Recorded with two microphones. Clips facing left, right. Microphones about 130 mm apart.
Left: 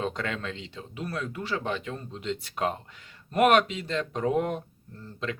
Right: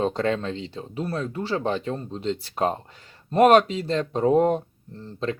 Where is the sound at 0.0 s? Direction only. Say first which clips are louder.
Right 8 dB; 35° right (ahead or behind).